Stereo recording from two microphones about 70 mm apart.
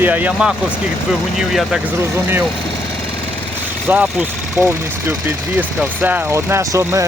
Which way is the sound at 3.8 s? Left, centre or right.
Right.